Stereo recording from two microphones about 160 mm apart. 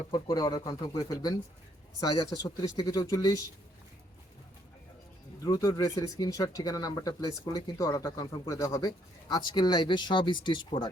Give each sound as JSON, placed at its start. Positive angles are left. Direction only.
{"t": 0.1, "sound": "speech", "side_deg": 25}
{"t": 5.4, "sound": "speech", "side_deg": 25}